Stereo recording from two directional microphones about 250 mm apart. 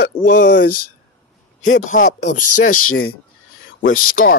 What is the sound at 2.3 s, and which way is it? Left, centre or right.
Speech, left.